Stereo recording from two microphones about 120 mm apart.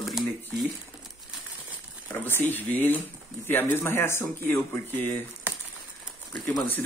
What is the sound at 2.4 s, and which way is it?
Speech, 15° left (ahead or behind).